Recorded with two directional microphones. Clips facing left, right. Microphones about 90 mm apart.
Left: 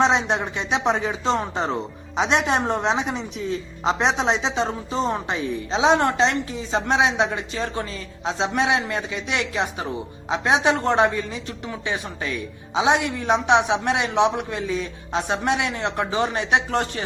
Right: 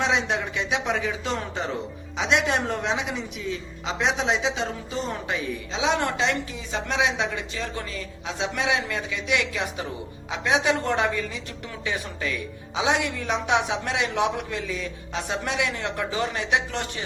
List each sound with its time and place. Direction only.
0.0 s a woman's voice: 35° left (ahead or behind)